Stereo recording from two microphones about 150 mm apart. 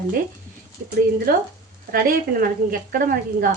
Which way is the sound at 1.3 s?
75° right (ahead or behind).